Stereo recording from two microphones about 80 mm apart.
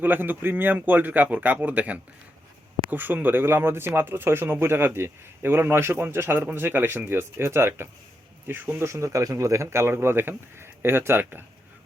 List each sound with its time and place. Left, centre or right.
0.0 s speech: right